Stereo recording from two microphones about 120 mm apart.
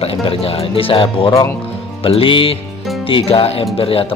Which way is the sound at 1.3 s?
25° left (ahead or behind).